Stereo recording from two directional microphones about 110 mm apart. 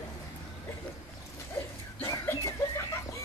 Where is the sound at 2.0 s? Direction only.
25° left (ahead or behind).